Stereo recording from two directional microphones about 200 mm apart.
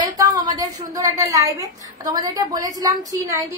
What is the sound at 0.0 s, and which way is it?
A woman's voice, 20° right (ahead or behind).